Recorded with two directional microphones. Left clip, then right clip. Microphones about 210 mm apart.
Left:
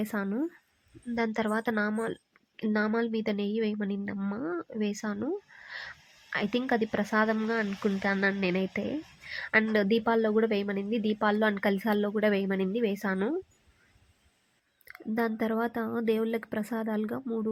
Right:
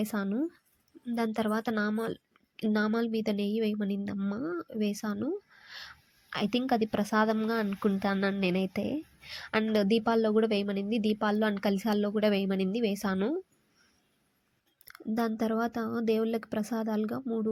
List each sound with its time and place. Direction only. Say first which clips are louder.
0.0 s speech: even; 15° right (ahead or behind)
14.8 s speech: left 1 dB; 15° right (ahead or behind)